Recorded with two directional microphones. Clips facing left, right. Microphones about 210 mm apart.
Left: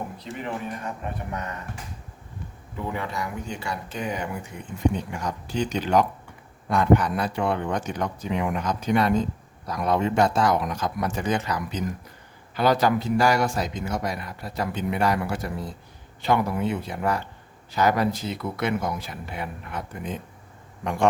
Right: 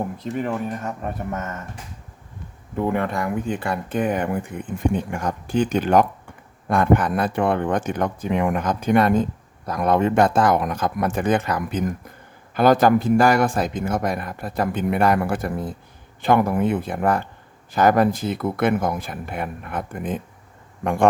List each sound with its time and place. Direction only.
0.2 s speech: 45° right (ahead or behind)
2.7 s speech: 55° right (ahead or behind)